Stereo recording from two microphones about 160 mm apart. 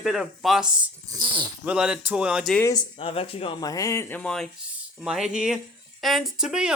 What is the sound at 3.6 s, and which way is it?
Speech, 20° left (ahead or behind).